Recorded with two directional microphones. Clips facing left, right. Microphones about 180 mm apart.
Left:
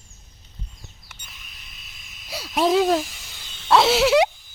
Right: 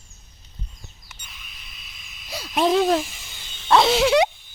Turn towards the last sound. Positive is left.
turn(degrees=5)  # may be behind; listen again after turning